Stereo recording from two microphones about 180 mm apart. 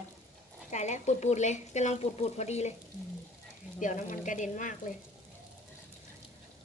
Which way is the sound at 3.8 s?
45° left (ahead or behind).